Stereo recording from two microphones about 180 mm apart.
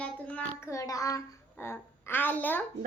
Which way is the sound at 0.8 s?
20° left (ahead or behind).